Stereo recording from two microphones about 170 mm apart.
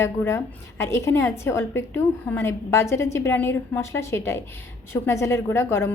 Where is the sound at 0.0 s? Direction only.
15° left (ahead or behind).